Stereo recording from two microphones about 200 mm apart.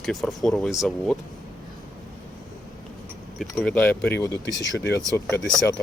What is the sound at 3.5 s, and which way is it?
Speech, 5° left (ahead or behind).